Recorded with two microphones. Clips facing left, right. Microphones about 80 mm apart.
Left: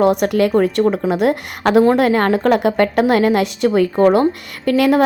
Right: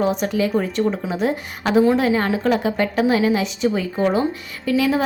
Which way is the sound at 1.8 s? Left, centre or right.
Left.